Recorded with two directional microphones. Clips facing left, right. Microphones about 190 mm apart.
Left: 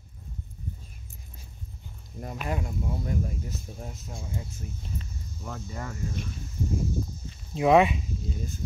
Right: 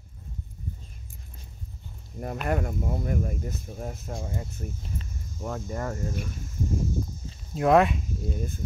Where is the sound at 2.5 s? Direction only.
55° right (ahead or behind).